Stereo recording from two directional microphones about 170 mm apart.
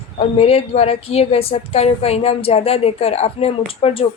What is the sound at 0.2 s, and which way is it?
A woman's voice, 40° left (ahead or behind).